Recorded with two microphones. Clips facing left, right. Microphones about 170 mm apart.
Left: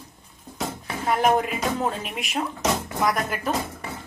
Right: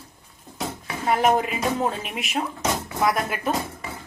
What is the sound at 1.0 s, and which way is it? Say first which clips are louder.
A woman's voice: right 1 dB; centre (ahead or behind).